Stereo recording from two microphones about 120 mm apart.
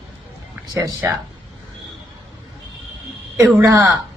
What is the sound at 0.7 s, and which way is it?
Speech, 30° right (ahead or behind).